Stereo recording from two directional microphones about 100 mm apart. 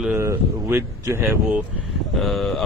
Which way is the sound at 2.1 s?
Centre (ahead or behind).